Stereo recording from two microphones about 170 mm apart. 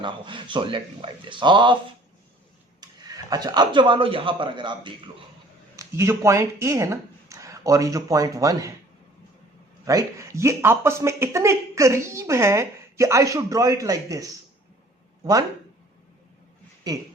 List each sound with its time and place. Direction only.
0.0 s speech: 30° right (ahead or behind)
2.8 s a man's voice: 20° right (ahead or behind)
5.7 s speech: 15° right (ahead or behind)
9.8 s speech: 20° right (ahead or behind)
16.9 s speech: 20° right (ahead or behind)